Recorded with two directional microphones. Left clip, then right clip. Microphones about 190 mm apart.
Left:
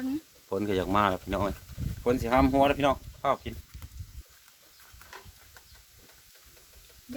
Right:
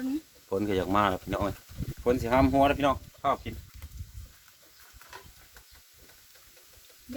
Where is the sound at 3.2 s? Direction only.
45° left (ahead or behind).